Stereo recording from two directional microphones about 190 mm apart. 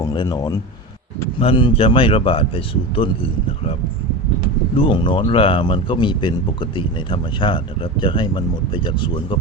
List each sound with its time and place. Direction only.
0.0 s speech: 20° left (ahead or behind)
4.8 s speech: 25° left (ahead or behind)